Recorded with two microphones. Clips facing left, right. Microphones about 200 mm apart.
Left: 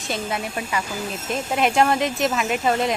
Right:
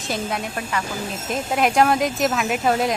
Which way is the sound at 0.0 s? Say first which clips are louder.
Right 1 dB; centre (ahead or behind).